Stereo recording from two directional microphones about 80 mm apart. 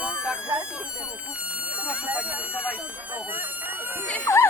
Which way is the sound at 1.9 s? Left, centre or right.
Centre.